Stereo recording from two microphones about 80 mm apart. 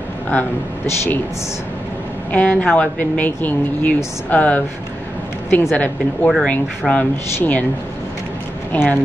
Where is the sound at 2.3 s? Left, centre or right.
Centre.